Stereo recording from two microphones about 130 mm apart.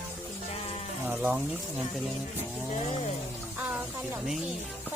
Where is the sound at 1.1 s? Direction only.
10° right (ahead or behind).